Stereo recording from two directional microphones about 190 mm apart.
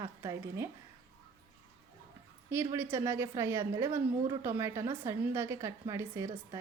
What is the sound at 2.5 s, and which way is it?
A woman's voice, 15° right (ahead or behind).